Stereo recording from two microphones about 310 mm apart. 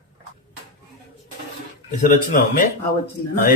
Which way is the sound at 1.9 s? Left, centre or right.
Left.